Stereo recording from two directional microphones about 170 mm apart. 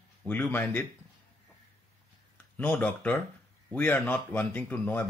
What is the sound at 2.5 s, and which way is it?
A man's voice, 10° left (ahead or behind).